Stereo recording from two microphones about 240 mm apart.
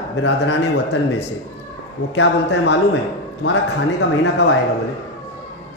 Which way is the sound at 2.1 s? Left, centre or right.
Left.